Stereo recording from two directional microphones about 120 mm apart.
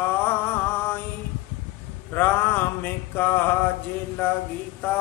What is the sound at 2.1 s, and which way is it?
Mantra, 15° left (ahead or behind).